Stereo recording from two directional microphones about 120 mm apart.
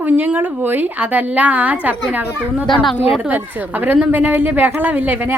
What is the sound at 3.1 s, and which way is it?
Speech, 10° right (ahead or behind).